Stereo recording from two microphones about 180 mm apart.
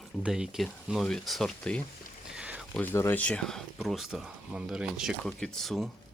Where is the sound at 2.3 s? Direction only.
5° right (ahead or behind).